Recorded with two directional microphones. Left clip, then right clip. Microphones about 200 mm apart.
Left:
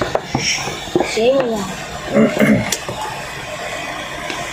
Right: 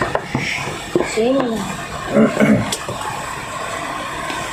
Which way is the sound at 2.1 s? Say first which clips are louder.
Even; centre (ahead or behind).